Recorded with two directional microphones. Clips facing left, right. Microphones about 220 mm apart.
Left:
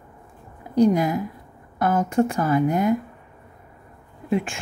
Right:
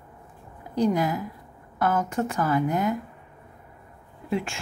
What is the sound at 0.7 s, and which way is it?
A woman's voice, 15° left (ahead or behind).